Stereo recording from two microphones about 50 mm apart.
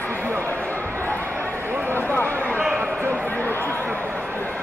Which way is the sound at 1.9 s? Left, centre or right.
Left.